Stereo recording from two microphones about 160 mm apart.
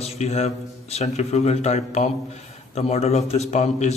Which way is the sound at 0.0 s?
40° left (ahead or behind).